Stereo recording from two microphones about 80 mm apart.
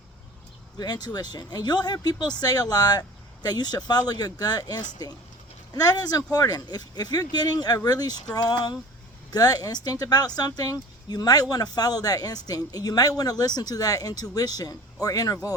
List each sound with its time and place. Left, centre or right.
0.8 s speech: left